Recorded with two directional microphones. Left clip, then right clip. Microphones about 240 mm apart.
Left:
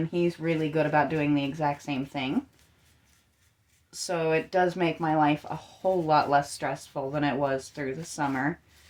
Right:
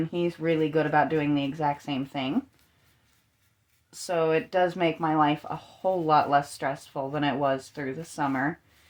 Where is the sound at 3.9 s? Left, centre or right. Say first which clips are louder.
Right 2 dB; right.